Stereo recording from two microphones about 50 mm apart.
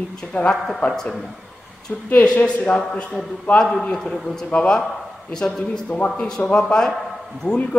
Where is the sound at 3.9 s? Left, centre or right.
Centre.